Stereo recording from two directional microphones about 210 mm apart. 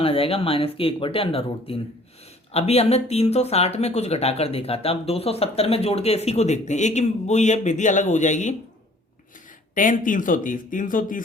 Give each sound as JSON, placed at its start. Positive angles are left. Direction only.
{"t": 0.0, "sound": "speech", "side_deg": 25}
{"t": 9.7, "sound": "speech", "side_deg": 40}